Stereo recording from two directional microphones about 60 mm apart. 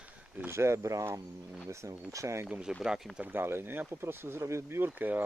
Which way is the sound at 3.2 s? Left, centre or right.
Right.